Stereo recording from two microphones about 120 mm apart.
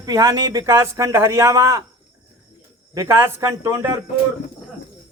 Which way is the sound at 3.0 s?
20° right (ahead or behind).